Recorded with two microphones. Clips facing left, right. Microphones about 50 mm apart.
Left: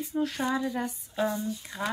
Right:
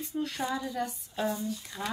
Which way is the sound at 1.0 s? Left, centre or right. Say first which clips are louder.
Left 5 dB; centre.